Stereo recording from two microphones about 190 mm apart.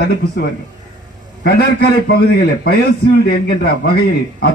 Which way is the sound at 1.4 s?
55° left (ahead or behind).